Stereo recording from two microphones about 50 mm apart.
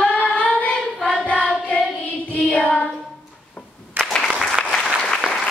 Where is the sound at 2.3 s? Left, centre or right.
Left.